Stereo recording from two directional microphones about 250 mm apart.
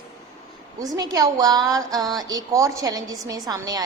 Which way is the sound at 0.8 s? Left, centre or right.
Centre.